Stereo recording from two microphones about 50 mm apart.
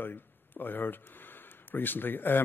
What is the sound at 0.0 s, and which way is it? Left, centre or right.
A man's voice, left.